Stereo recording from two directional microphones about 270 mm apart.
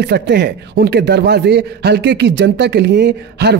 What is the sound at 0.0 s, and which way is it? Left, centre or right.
A man's voice, right.